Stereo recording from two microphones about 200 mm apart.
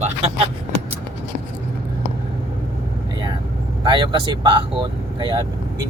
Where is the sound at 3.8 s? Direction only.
25° right (ahead or behind).